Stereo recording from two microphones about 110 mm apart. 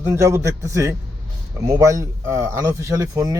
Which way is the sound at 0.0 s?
25° right (ahead or behind).